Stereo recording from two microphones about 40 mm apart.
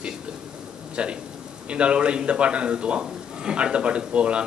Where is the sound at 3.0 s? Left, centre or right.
Centre.